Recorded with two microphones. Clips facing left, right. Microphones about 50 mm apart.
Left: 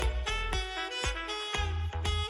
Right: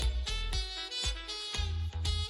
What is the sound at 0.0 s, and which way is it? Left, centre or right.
Music, left.